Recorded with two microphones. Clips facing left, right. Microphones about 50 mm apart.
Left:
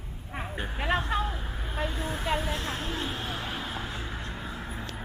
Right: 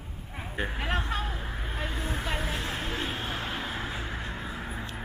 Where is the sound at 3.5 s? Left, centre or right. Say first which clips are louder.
Right 1 dB; centre.